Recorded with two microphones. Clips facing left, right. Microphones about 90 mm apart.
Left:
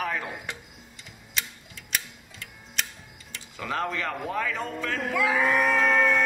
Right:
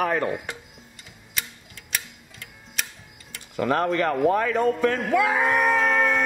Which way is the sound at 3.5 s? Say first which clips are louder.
Right 8 dB; 50° right (ahead or behind).